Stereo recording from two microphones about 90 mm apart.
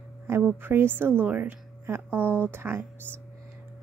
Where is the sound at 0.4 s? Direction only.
20° right (ahead or behind).